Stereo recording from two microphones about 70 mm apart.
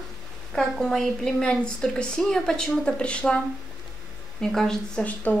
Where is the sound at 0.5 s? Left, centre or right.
Centre.